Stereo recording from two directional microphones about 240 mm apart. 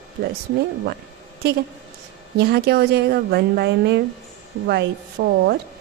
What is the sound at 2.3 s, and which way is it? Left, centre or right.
A woman's voice, right.